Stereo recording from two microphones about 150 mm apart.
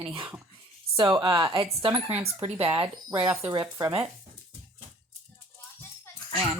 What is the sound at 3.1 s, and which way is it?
Speech, 10° right (ahead or behind).